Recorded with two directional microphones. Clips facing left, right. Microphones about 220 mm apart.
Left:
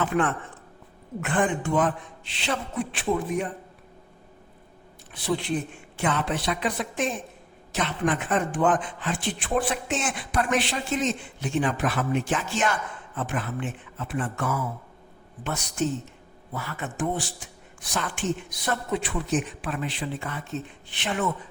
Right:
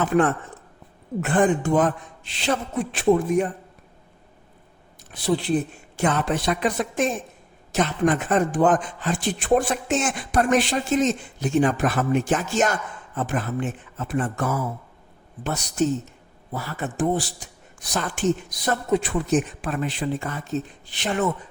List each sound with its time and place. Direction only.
0.0 s speech: 40° right (ahead or behind)
5.1 s speech: 40° right (ahead or behind)